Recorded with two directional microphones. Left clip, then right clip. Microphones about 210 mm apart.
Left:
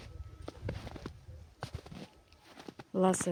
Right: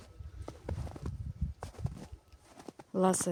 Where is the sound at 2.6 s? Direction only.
5° right (ahead or behind).